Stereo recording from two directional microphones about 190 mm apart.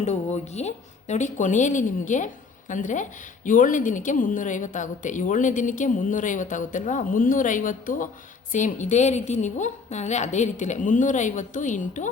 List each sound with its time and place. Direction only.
0.0 s speech: 35° left (ahead or behind)